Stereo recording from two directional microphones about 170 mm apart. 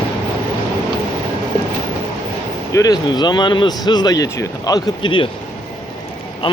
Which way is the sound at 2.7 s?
20° left (ahead or behind).